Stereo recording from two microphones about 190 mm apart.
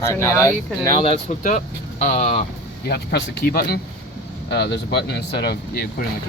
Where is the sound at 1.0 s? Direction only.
30° left (ahead or behind).